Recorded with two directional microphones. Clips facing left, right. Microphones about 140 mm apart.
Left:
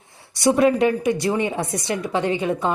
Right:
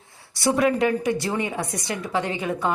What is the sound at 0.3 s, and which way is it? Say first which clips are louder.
Speech: left 4 dB; 20° left (ahead or behind).